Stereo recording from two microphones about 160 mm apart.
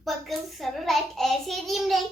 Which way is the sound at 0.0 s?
Centre (ahead or behind).